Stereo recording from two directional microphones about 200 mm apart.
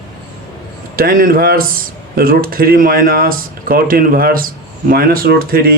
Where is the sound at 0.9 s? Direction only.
45° right (ahead or behind).